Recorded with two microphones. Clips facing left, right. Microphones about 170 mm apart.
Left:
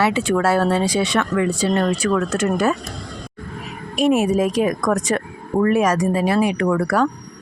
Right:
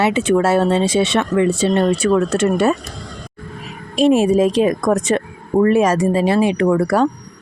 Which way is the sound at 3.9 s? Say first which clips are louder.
Right 4 dB; 30° right (ahead or behind).